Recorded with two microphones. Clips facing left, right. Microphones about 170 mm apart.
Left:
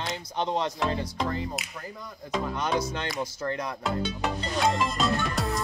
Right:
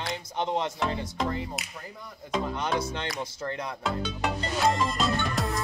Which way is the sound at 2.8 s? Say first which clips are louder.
Left 2 dB; 25° right (ahead or behind).